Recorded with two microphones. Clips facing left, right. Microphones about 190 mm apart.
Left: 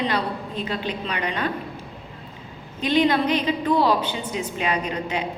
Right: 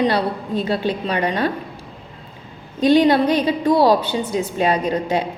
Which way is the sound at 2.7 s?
35° right (ahead or behind).